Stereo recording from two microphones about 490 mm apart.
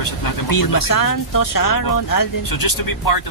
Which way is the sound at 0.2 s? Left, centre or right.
Left.